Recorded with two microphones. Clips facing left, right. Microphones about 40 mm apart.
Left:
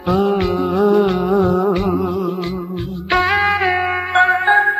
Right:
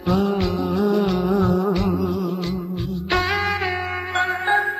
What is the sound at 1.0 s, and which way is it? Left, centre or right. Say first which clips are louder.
Music: left 4 dB; left.